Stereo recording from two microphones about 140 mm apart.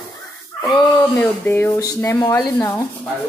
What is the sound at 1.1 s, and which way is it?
A woman's voice, 15° left (ahead or behind).